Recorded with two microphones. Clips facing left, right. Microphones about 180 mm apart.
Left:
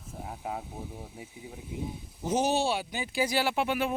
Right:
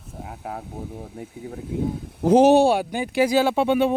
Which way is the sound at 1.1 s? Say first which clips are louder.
Right 9 dB; 65° right (ahead or behind).